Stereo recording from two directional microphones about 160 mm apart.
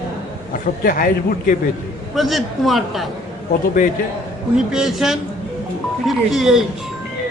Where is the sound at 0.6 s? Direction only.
60° left (ahead or behind).